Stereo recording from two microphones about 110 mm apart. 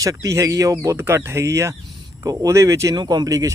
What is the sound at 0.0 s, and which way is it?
Speech, 30° right (ahead or behind).